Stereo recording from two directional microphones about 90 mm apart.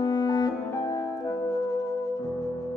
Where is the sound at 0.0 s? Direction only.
50° left (ahead or behind).